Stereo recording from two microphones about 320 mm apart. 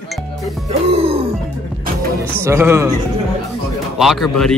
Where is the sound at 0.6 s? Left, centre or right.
Centre.